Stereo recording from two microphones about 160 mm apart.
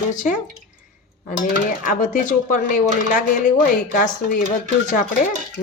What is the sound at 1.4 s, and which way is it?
Speech, 60° left (ahead or behind).